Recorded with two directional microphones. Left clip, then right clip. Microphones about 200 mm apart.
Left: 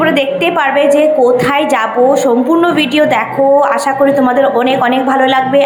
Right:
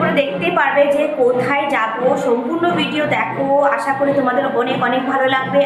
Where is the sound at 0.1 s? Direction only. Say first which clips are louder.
Left 5 dB; 45° left (ahead or behind).